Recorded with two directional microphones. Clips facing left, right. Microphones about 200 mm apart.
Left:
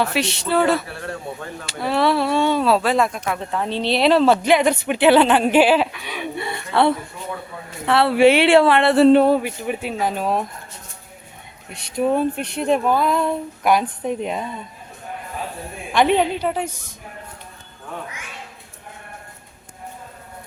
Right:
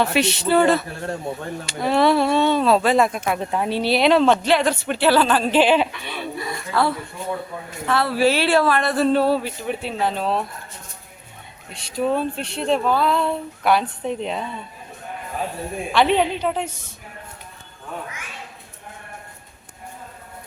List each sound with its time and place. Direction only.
0.0 s speech: centre (ahead or behind)
4.4 s speech: 15° left (ahead or behind)
6.3 s gasp: 25° left (ahead or behind)
7.9 s speech: 30° left (ahead or behind); by 10.4 s 10° left (ahead or behind)
11.7 s speech: 20° left (ahead or behind)
15.9 s speech: 15° left (ahead or behind)